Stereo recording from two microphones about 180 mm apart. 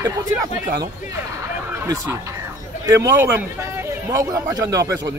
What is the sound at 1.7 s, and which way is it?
A man's voice, 20° right (ahead or behind).